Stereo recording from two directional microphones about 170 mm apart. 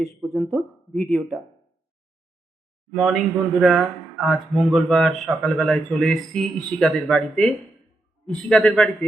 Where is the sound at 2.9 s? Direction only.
Centre (ahead or behind).